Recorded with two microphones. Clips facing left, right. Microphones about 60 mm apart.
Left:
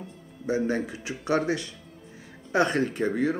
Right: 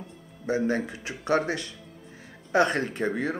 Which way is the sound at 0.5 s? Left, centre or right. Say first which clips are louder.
Even; right.